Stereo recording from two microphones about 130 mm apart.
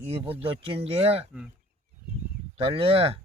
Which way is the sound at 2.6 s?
50° right (ahead or behind).